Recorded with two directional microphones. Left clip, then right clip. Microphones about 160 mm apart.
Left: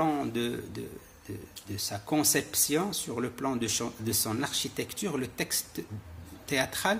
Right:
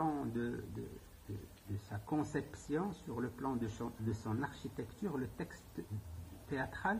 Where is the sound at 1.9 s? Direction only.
25° left (ahead or behind).